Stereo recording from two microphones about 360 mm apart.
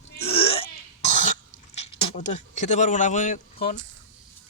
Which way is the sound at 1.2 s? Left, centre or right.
Centre.